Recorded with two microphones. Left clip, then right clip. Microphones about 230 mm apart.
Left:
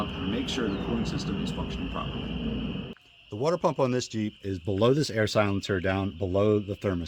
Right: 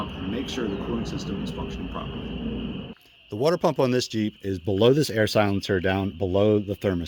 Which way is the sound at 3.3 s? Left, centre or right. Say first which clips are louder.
Right 4 dB; right.